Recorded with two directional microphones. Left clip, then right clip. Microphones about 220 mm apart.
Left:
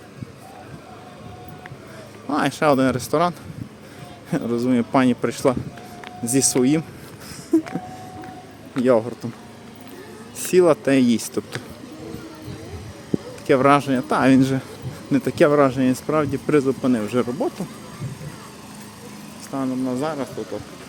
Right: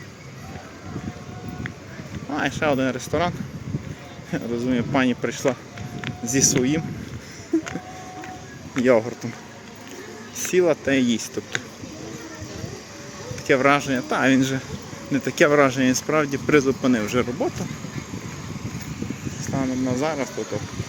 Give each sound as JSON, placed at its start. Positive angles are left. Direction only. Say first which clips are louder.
{"t": 2.3, "sound": "a man's voice", "louder": "left 4 dB", "side_deg": 25}
{"t": 7.5, "sound": "a sound", "louder": "left 4 dB", "side_deg": 25}
{"t": 8.7, "sound": "speech", "louder": "even", "side_deg": 10}
{"t": 10.5, "sound": "a man's voice", "louder": "left 4 dB", "side_deg": 25}
{"t": 13.5, "sound": "a man's voice", "louder": "left 2 dB", "side_deg": 20}
{"t": 19.5, "sound": "speech", "louder": "even", "side_deg": 5}